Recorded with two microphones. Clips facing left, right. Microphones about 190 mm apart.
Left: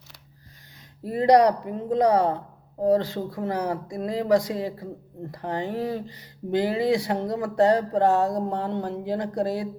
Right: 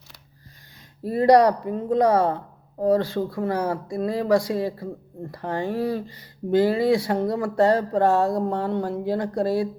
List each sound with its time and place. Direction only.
1.0 s speech: 15° left (ahead or behind)